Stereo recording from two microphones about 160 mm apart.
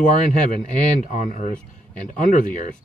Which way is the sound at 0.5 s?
50° left (ahead or behind).